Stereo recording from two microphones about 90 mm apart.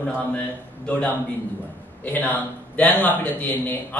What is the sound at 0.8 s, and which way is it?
Speech, 20° left (ahead or behind).